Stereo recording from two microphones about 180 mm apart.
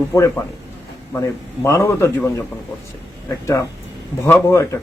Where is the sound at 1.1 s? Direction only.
15° left (ahead or behind).